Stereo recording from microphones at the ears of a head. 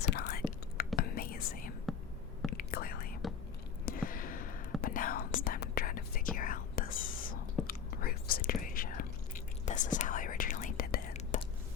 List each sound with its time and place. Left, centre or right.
0.1 s whispering: left